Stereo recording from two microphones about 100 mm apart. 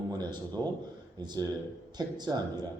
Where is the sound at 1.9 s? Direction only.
45° right (ahead or behind).